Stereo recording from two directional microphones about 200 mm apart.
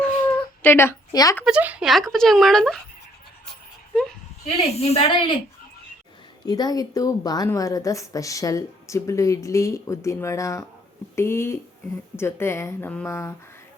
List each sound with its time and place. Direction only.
0.3 s a sound: 10° left (ahead or behind)
1.5 s speech: 5° right (ahead or behind)
3.4 s dog: centre (ahead or behind)
4.4 s a woman's voice: 30° left (ahead or behind)
6.4 s a woman's voice: 20° left (ahead or behind)